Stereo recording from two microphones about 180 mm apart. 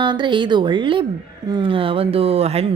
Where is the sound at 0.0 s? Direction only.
25° right (ahead or behind).